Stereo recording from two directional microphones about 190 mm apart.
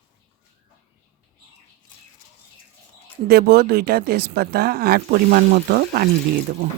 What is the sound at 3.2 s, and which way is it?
Speech, 55° right (ahead or behind).